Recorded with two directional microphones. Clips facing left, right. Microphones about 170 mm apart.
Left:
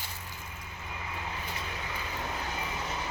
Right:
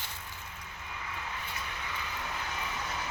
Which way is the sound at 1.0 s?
25° left (ahead or behind).